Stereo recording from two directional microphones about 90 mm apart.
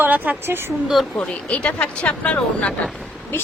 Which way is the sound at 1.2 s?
15° left (ahead or behind).